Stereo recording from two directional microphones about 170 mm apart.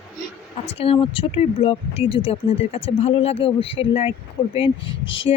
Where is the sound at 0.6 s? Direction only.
35° left (ahead or behind).